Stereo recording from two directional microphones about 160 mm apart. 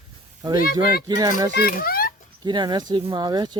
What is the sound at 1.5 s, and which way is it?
Speech, 70° left (ahead or behind).